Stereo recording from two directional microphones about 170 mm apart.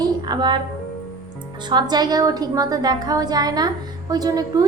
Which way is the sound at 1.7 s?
25° right (ahead or behind).